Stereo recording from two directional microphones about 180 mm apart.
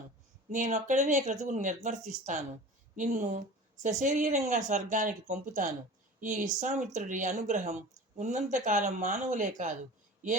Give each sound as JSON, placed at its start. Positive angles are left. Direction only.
{"t": 0.5, "sound": "speech", "side_deg": -45}